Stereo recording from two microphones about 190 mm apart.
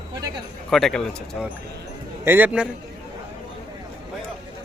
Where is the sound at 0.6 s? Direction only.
Centre (ahead or behind).